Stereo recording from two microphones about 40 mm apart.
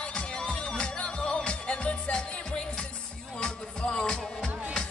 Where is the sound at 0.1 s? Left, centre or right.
Left.